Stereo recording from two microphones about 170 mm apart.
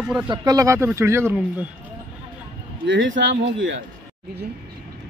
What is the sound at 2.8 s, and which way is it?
Speech, 90° right.